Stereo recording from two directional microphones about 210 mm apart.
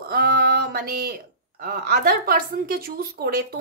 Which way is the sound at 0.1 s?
45° right (ahead or behind).